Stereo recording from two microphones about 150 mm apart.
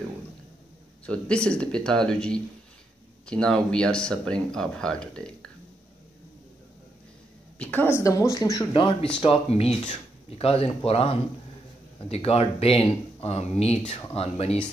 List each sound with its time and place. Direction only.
1.0 s a man's voice: 5° left (ahead or behind)
7.5 s a woman's voice: 10° left (ahead or behind)
8.7 s speech: 35° left (ahead or behind)